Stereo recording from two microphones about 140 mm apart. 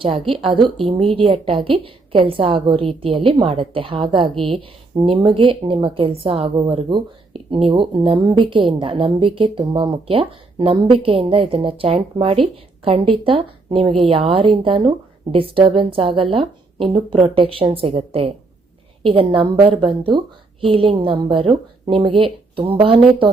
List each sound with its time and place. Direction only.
0.0 s a woman's voice: 40° right (ahead or behind)